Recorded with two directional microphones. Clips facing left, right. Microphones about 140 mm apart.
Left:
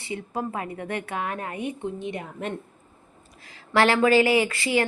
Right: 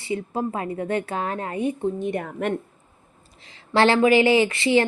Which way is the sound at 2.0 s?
50° right (ahead or behind).